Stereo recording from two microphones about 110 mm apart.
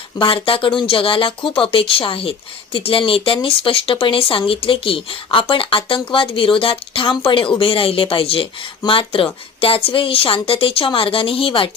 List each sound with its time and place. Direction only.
0.2 s speech: 55° left (ahead or behind)